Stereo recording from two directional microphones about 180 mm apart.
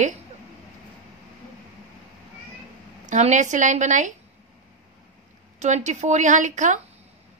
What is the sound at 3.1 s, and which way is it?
Speech, 40° right (ahead or behind).